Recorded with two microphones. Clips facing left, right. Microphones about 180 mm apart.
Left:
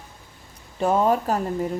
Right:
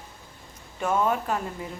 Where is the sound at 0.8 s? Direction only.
35° left (ahead or behind).